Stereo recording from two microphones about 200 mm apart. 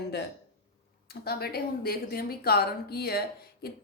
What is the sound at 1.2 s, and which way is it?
A woman's voice, 50° left (ahead or behind).